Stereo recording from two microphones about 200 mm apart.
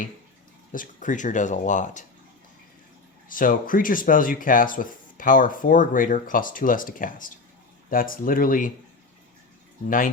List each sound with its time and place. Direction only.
0.7 s speech: 40° left (ahead or behind)
3.2 s speech: 45° left (ahead or behind)